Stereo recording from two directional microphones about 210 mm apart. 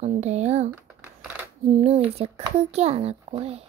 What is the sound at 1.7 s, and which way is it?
A child's voice, 30° right (ahead or behind).